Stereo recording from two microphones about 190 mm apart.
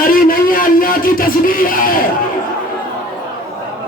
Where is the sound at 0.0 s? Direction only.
45° left (ahead or behind).